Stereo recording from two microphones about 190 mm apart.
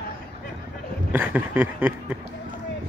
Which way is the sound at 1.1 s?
10° right (ahead or behind).